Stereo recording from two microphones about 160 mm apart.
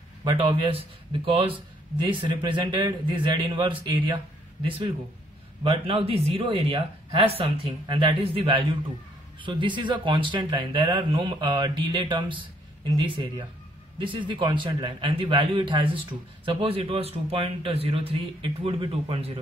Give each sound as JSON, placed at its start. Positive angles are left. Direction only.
{"t": 0.2, "sound": "a man's voice", "side_deg": -30}